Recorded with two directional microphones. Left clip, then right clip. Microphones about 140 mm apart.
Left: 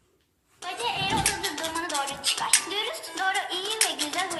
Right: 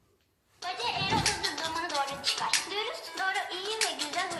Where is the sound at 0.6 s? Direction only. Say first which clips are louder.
Left 3 dB; 35° left (ahead or behind).